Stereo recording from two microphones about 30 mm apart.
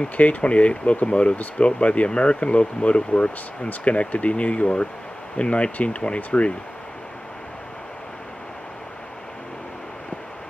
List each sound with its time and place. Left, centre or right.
0.2 s speech: left